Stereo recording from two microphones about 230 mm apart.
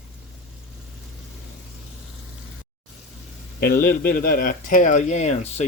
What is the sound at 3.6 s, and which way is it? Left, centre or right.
Speech, left.